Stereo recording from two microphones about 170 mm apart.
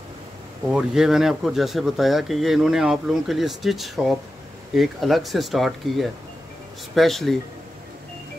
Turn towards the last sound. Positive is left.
turn(degrees=0)  # may be behind; listen again after turning